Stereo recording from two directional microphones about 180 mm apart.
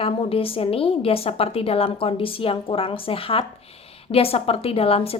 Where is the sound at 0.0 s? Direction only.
30° left (ahead or behind).